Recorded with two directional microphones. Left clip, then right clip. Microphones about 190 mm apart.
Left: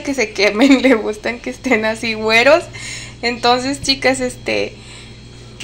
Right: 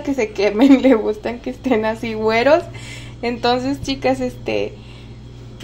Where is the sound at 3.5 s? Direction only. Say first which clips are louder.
Left 4 dB; 5° right (ahead or behind).